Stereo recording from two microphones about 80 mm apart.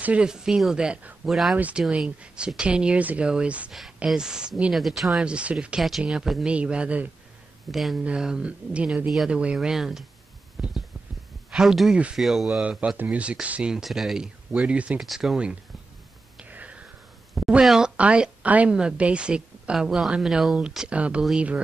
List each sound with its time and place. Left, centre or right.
0.0 s speech: centre
3.7 s speech: centre
4.7 s speech: centre
5.2 s speech: centre
5.8 s speech: centre
7.7 s speech: centre
10.6 s a sound: centre
11.5 s speech: centre
12.6 s speech: centre
14.5 s speech: centre
15.0 s speech: centre
16.3 s whispering: centre
17.3 s speech: centre